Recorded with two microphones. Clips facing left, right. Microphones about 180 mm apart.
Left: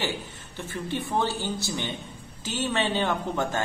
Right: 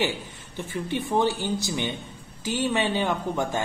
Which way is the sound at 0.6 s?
15° right (ahead or behind).